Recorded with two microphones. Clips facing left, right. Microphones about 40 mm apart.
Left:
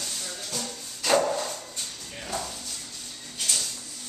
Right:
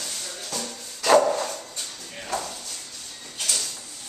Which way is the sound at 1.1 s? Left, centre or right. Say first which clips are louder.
Right 5 dB; right.